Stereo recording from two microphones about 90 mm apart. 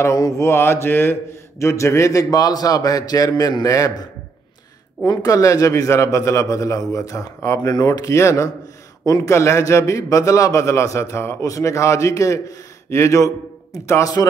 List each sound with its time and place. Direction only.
0.0 s mantra: 35° left (ahead or behind)
1.6 s a man's voice: 30° left (ahead or behind)